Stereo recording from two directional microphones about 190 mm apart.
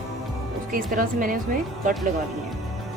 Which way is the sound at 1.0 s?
45° right (ahead or behind).